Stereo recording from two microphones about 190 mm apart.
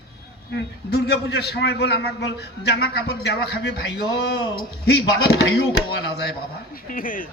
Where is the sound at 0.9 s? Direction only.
55° left (ahead or behind).